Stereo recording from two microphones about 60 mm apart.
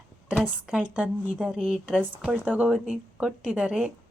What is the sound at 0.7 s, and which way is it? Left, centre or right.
Speech, centre.